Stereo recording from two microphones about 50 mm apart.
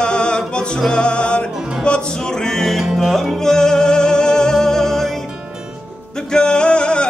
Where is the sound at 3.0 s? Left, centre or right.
Centre.